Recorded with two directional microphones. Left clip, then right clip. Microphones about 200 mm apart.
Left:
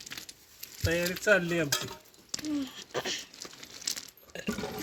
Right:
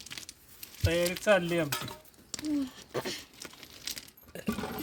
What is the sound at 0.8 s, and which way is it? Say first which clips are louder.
Cutlery: right 1 dB; 30° right (ahead or behind).